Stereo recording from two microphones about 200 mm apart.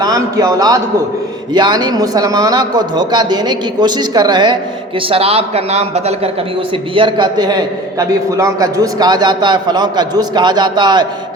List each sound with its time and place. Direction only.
0.0 s a man's voice: 20° right (ahead or behind)